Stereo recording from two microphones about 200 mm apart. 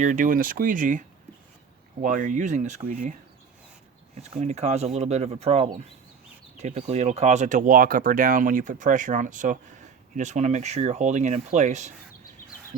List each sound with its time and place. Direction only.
0.0 s speech: 40° right (ahead or behind)
4.2 s speech: 35° right (ahead or behind)